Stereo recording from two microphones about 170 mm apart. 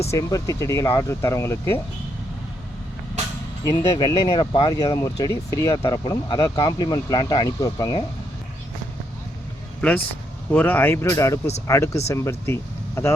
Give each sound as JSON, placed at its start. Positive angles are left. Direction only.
{"t": 0.1, "sound": "speech", "side_deg": 20}
{"t": 3.6, "sound": "speech", "side_deg": 25}
{"t": 10.5, "sound": "speech", "side_deg": 10}